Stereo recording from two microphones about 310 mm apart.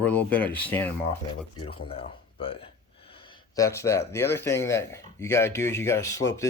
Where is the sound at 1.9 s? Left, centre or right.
Centre.